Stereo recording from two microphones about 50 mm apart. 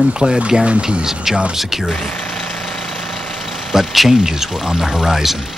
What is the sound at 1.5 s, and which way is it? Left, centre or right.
Speech, centre.